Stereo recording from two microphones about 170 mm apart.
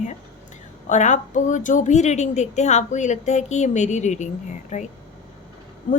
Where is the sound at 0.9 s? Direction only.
45° left (ahead or behind).